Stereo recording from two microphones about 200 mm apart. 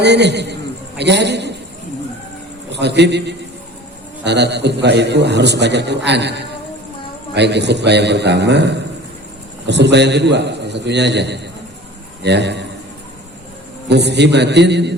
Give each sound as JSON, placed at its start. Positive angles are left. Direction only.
{"t": 0.0, "sound": "a man's voice", "side_deg": -60}
{"t": 2.7, "sound": "a man's voice", "side_deg": -60}
{"t": 7.3, "sound": "a man's voice", "side_deg": -60}
{"t": 13.8, "sound": "a man's voice", "side_deg": -60}